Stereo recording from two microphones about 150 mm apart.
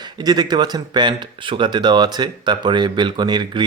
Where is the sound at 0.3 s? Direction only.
25° right (ahead or behind).